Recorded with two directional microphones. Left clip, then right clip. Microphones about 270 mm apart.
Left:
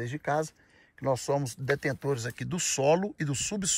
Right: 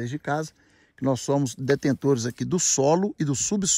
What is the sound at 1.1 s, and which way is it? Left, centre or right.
Speech, right.